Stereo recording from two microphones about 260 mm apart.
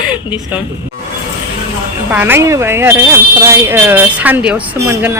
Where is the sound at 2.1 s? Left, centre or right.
Centre.